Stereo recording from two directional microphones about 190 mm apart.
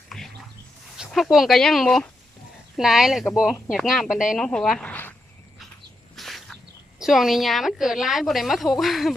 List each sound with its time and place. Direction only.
0.1 s a sound: 5° left (ahead or behind)
0.9 s a woman's voice: centre (ahead or behind)
6.1 s cricket: centre (ahead or behind)
7.0 s a woman's voice: centre (ahead or behind)